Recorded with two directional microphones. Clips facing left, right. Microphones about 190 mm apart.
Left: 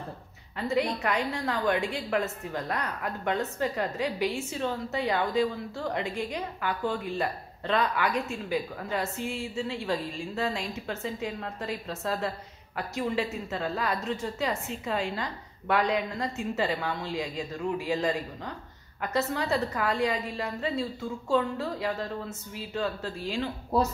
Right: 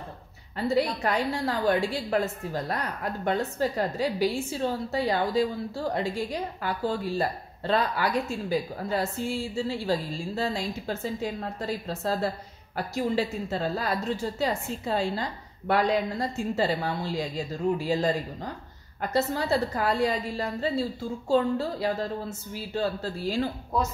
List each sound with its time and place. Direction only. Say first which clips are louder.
0.6 s a woman's voice: right 2 dB; 35° right (ahead or behind)
23.7 s speech: left 3 dB; 30° left (ahead or behind)